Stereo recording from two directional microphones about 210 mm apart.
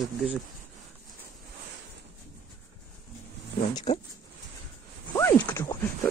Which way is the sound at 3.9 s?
30° left (ahead or behind).